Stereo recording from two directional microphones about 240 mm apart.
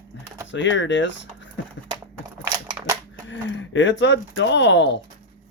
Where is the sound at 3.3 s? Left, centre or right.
Left.